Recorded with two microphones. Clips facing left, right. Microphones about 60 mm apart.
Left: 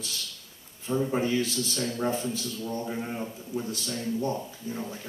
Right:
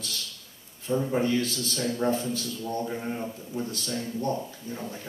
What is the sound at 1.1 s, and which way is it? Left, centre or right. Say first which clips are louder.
Speech: right 1 dB; centre.